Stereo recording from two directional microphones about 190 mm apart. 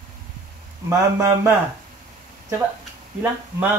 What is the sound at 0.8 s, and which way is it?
Speech, 15° right (ahead or behind).